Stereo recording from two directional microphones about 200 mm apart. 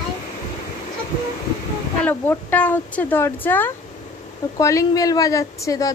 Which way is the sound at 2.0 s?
10° left (ahead or behind).